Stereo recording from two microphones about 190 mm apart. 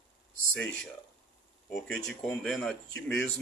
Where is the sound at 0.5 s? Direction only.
5° left (ahead or behind).